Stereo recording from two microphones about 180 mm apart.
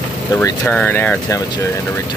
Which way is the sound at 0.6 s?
5° left (ahead or behind).